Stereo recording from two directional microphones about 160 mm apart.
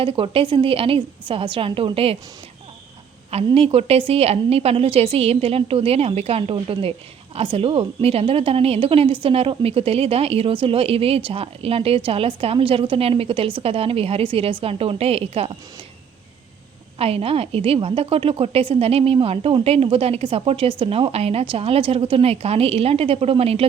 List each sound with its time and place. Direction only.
0.0 s a woman's voice: 35° right (ahead or behind)
3.3 s a woman's voice: 40° right (ahead or behind)
17.0 s a woman's voice: 35° right (ahead or behind)